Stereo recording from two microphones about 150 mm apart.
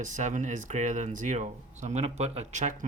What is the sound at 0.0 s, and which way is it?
Speech, 55° right (ahead or behind).